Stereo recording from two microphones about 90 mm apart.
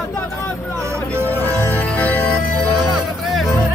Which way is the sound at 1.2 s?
20° left (ahead or behind).